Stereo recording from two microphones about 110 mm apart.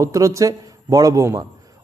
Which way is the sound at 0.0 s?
30° right (ahead or behind).